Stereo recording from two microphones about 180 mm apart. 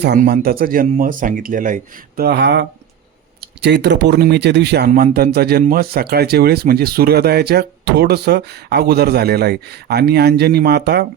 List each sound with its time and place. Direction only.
0.0 s speech: 60° right (ahead or behind)
4.9 s speech: 50° right (ahead or behind); by 11.0 s 65° right (ahead or behind)